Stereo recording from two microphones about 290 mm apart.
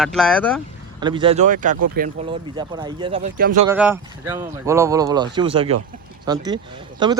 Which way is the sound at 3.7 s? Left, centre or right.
Centre.